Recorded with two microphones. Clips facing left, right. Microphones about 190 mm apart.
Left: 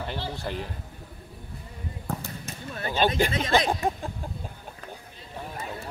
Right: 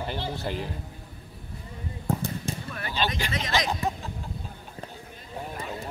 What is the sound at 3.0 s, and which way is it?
Speech, 50° left (ahead or behind).